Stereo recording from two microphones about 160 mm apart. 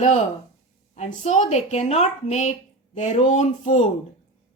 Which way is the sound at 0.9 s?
45° left (ahead or behind).